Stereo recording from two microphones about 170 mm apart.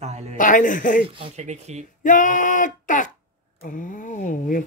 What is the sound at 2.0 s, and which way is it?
Speech, 50° left (ahead or behind).